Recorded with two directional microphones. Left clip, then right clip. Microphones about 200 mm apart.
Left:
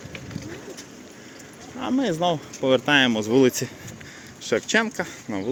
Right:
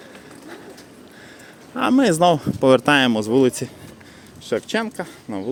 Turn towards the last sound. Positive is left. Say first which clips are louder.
# right 1 dB
turn(degrees=-5)  # may be behind; listen again after turning